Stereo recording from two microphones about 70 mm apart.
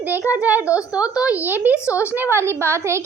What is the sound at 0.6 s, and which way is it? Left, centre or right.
Speech, left.